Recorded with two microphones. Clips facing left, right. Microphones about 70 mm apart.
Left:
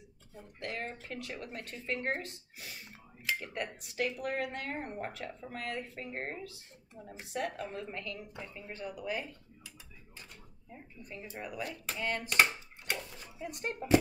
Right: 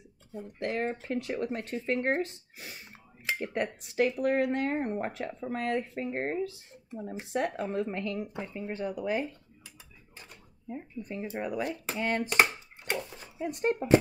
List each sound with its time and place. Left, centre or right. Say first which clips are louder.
0.6 s a woman's voice: right 8 dB; right
11.1 s a woman's voice: right 8 dB; right